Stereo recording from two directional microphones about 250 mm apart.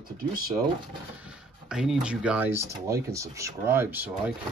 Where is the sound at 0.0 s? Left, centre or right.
Right.